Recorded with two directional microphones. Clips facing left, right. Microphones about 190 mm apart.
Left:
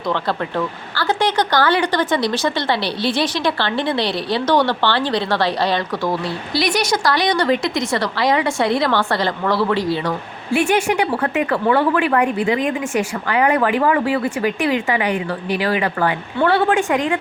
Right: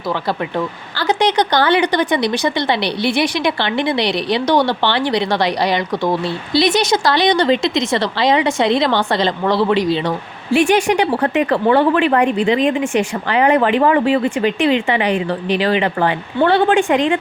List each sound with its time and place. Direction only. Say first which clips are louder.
0.1 s speech: right 1 dB; 15° right (ahead or behind); by 17.2 s 30° right (ahead or behind)